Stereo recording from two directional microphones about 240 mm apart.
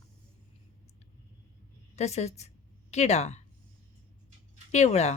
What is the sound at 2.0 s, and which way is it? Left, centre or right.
Speech, left.